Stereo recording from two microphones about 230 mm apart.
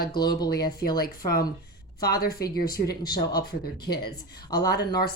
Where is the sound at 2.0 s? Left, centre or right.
Left.